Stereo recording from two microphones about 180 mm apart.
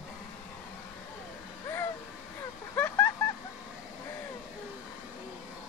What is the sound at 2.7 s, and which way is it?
Vehicle, 10° left (ahead or behind).